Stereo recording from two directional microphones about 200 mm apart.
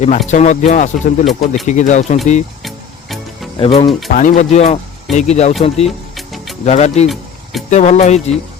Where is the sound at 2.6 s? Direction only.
Centre (ahead or behind).